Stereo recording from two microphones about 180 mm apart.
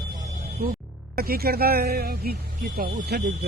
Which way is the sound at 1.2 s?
55° right (ahead or behind).